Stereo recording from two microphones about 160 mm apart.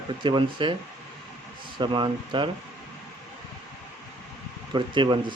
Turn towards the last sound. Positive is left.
turn(degrees=-30)  # may be behind; listen again after turning